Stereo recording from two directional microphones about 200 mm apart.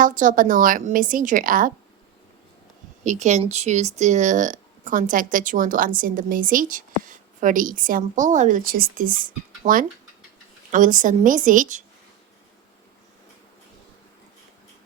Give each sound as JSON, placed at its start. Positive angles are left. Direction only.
{"t": 0.0, "sound": "speech", "side_deg": -40}
{"t": 3.0, "sound": "speech", "side_deg": -35}